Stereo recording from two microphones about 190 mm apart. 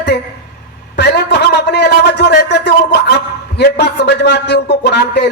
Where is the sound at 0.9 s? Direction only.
65° left (ahead or behind).